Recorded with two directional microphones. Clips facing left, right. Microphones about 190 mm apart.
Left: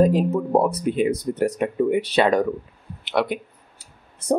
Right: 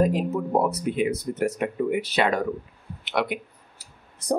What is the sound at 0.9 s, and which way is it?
Speech, 35° left (ahead or behind).